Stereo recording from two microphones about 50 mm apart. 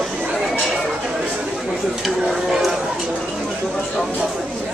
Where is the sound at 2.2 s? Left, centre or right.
Centre.